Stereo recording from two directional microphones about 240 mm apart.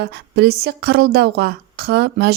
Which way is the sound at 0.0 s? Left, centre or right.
Right.